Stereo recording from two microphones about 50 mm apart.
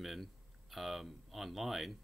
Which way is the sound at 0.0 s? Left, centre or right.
Centre.